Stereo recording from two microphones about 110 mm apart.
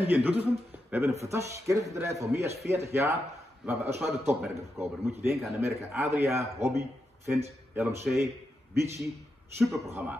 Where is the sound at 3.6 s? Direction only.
5° right (ahead or behind).